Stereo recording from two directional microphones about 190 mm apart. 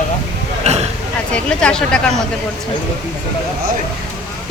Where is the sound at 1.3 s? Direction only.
5° left (ahead or behind).